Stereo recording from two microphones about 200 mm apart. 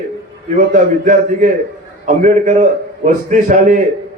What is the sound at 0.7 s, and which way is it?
A man's voice, 40° right (ahead or behind).